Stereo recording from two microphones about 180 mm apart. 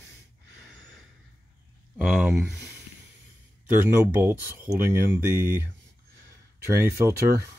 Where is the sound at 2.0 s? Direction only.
5° right (ahead or behind).